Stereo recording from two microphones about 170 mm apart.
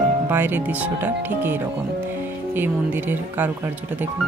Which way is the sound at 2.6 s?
10° right (ahead or behind).